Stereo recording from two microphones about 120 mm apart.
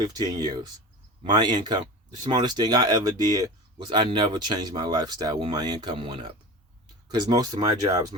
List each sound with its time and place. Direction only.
0.0 s speech: 35° right (ahead or behind)
7.1 s speech: 35° right (ahead or behind)